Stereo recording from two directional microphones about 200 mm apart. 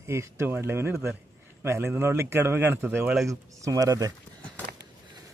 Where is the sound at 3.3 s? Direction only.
15° right (ahead or behind).